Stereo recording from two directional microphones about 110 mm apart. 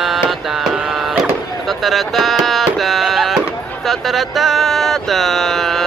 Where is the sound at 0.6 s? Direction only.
5° right (ahead or behind).